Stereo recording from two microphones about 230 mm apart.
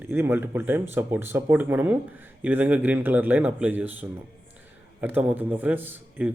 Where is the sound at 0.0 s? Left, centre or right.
Centre.